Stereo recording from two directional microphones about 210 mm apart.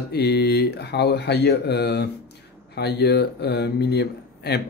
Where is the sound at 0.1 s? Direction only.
50° left (ahead or behind).